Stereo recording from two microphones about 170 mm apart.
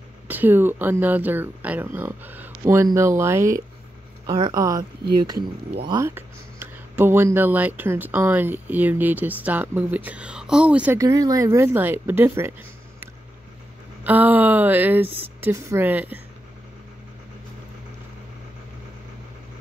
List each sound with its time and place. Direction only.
0.3 s speech: 10° right (ahead or behind)
5.9 s speech: 15° right (ahead or behind)
11.0 s speech: 20° right (ahead or behind)
14.0 s speech: 10° right (ahead or behind)